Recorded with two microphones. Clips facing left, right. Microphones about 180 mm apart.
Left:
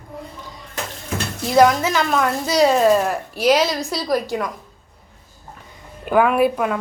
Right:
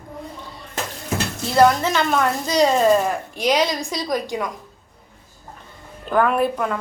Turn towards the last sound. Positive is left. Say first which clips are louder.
# left 3 dB
turn(degrees=10)  # may be behind; listen again after turning